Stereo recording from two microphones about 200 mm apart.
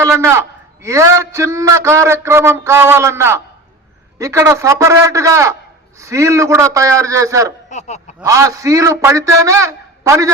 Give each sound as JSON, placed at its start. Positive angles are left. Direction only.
{"t": 0.0, "sound": "a man's voice", "side_deg": -15}
{"t": 7.7, "sound": "snicker", "side_deg": 35}
{"t": 8.2, "sound": "a man's voice", "side_deg": -15}